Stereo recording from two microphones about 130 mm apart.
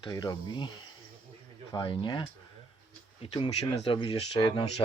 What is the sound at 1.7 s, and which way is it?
Speech, 40° left (ahead or behind).